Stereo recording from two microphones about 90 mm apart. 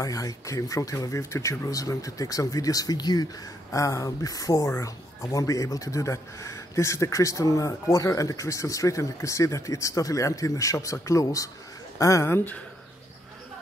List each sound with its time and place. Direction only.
0.0 s speech: 40° left (ahead or behind)
3.7 s speech: 35° left (ahead or behind)